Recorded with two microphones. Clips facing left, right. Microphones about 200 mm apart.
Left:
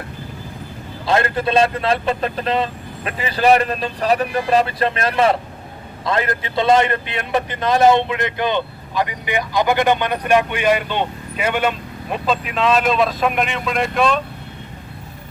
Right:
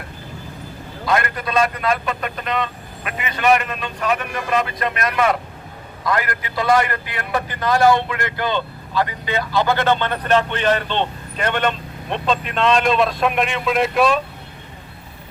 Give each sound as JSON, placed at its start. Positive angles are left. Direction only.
{"t": 1.0, "sound": "a man's voice", "side_deg": 30}